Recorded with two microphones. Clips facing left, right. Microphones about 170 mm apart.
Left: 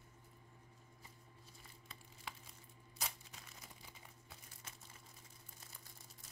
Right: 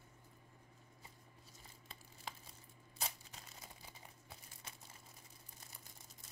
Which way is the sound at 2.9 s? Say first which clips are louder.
Right 1 dB; 30° right (ahead or behind).